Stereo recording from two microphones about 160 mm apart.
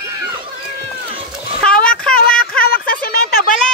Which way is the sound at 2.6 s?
70° left (ahead or behind).